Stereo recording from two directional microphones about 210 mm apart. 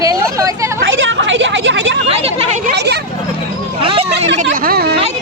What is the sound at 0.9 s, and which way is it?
A woman's voice, 60° right (ahead or behind).